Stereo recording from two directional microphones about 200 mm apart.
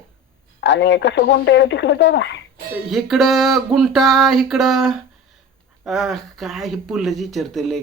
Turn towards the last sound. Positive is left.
turn(degrees=0)  # may be behind; listen again after turning